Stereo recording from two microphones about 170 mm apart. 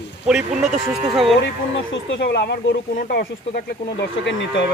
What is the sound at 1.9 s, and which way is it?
A man's voice, 85° left.